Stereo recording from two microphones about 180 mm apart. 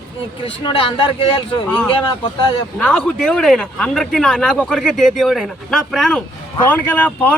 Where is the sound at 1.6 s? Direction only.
5° left (ahead or behind).